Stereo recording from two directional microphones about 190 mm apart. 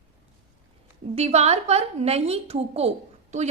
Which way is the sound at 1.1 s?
35° right (ahead or behind).